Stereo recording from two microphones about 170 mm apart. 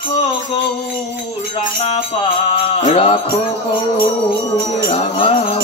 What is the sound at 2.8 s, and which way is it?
Music, 35° left (ahead or behind).